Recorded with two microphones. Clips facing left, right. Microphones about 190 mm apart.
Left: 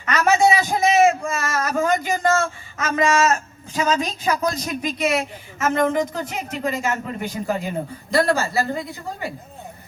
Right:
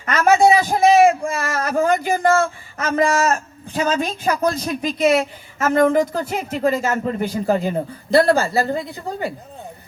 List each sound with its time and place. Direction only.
0.1 s a sound: 55° right (ahead or behind)
1.9 s a man's voice: 55° right (ahead or behind)
2.7 s speech: 35° right (ahead or behind)
3.8 s a woman's voice: 55° right (ahead or behind)
4.4 s speech: 30° right (ahead or behind)